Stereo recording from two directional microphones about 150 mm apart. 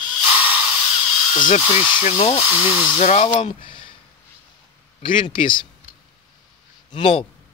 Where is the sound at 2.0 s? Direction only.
40° left (ahead or behind).